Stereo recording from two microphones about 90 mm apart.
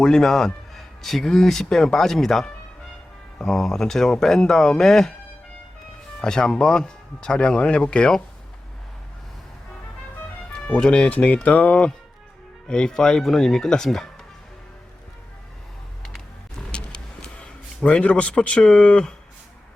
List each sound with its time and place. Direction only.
0.0 s a man's voice: 5° left (ahead or behind)
6.2 s speech: 5° left (ahead or behind)
10.5 s speech: 10° left (ahead or behind)
16.0 s music: 5° left (ahead or behind)
17.8 s speech: 15° left (ahead or behind)